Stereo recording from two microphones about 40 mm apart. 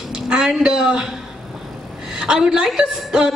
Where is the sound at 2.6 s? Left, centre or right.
Centre.